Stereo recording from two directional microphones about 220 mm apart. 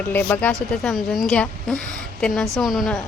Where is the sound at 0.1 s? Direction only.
10° left (ahead or behind).